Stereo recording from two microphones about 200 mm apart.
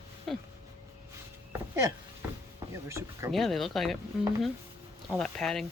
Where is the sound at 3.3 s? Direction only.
Centre (ahead or behind).